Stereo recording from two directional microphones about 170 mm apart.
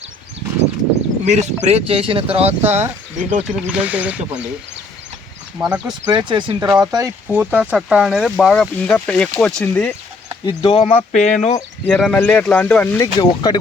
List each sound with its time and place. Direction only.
1.2 s speech: 40° right (ahead or behind)
3.4 s speech: 5° right (ahead or behind)
5.5 s speech: 5° right (ahead or behind)
6.1 s speech: 25° right (ahead or behind)
7.3 s speech: 10° right (ahead or behind); by 9.9 s 5° left (ahead or behind)
10.4 s speech: 30° left (ahead or behind)
11.5 s speech: 10° left (ahead or behind)
13.1 s speech: 25° left (ahead or behind)